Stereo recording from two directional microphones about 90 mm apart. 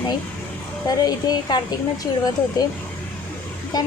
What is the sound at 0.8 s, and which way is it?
Speech, 50° left (ahead or behind).